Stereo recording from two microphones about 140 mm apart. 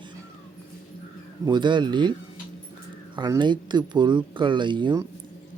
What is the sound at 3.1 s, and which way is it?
Speech, 30° right (ahead or behind).